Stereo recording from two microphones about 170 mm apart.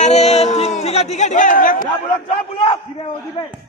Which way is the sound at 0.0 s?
40° left (ahead or behind).